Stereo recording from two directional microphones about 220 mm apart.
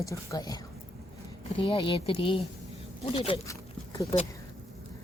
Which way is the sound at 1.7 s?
25° left (ahead or behind).